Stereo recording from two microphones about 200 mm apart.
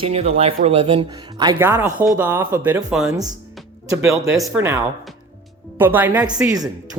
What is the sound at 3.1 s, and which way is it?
Speech, 20° right (ahead or behind).